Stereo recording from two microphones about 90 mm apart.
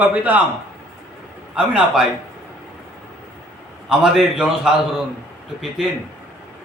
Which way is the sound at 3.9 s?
5° right (ahead or behind).